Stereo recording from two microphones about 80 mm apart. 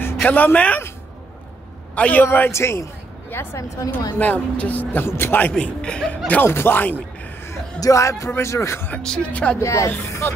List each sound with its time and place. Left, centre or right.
0.2 s speech: left
2.0 s a man's voice: centre
2.2 s speech: left
4.2 s speech: centre
5.5 s speech: centre
6.2 s speech: left
7.8 s speech: left
8.9 s speech: centre
9.6 s speech: left